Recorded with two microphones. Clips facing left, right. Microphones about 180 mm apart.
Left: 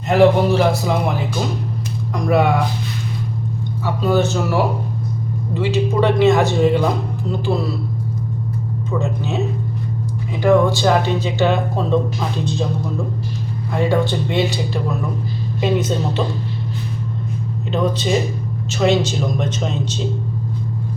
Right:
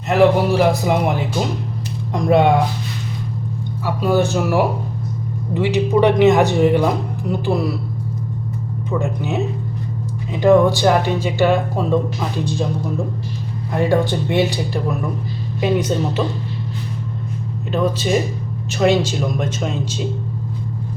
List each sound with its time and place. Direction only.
0.1 s speech: 5° right (ahead or behind)
2.1 s speech: 25° right (ahead or behind)
3.8 s speech: 10° right (ahead or behind)
9.0 s speech: 15° right (ahead or behind)
13.7 s speech: 15° right (ahead or behind)
17.7 s speech: 10° right (ahead or behind)